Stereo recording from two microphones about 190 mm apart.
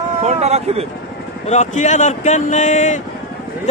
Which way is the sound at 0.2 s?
35° right (ahead or behind).